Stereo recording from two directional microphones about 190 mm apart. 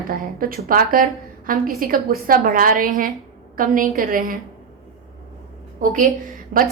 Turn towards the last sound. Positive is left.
turn(degrees=-45)  # may be behind; listen again after turning